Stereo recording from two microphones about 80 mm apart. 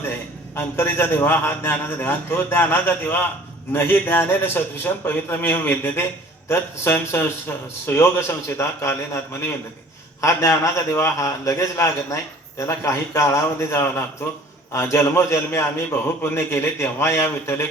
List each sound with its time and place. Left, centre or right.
0.5 s a man's voice: left
8.5 s a man's voice: left